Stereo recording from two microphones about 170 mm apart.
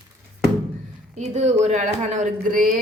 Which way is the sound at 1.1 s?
40° right (ahead or behind).